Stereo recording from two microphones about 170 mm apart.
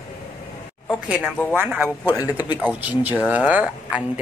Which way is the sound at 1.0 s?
5° right (ahead or behind).